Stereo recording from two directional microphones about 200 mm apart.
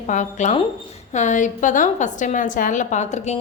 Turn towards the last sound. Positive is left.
turn(degrees=35)  # may be behind; listen again after turning